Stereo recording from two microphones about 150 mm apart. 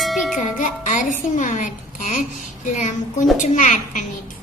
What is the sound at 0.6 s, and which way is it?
A woman's voice, 60° left (ahead or behind).